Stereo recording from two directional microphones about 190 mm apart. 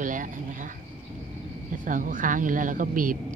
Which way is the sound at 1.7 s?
45° right (ahead or behind).